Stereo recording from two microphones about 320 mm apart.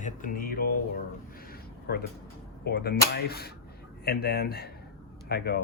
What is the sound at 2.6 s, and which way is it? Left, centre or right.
Speech, left.